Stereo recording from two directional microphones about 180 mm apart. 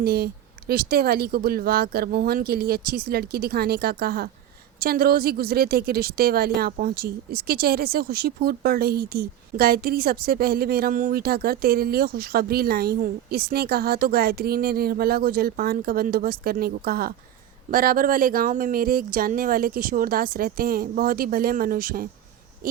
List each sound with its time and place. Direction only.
0.0 s speech: 60° right (ahead or behind)